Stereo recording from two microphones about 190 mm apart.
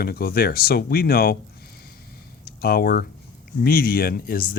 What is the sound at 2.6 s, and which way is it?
Speech, 55° left (ahead or behind).